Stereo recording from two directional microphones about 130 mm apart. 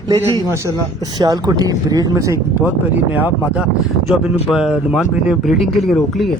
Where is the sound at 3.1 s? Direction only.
10° right (ahead or behind).